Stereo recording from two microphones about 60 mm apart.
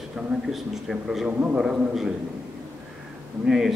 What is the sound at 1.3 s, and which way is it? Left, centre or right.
Speech, centre.